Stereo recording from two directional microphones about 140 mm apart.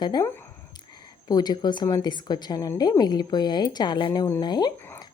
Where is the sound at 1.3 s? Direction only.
30° left (ahead or behind).